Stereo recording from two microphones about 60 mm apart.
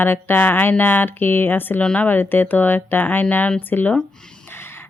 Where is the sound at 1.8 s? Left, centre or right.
Centre.